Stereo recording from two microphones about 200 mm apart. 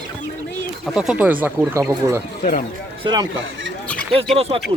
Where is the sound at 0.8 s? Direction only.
5° right (ahead or behind); by 3.3 s 20° right (ahead or behind).